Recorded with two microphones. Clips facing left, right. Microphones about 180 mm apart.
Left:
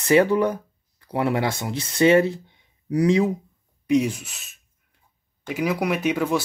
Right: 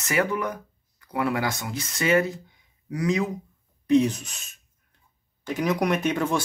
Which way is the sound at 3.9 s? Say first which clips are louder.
Right 1 dB; 10° left (ahead or behind).